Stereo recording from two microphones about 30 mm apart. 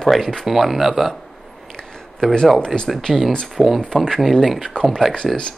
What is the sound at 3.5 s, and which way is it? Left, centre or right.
Speech, centre.